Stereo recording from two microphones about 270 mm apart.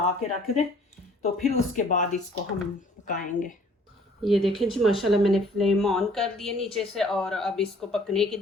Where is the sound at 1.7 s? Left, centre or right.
Left.